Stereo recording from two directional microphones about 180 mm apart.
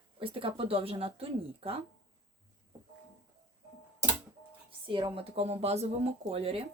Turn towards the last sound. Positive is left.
turn(degrees=-30)  # may be behind; listen again after turning